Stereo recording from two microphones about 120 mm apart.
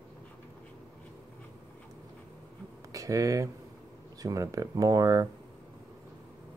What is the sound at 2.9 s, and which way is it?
Speech, 30° right (ahead or behind).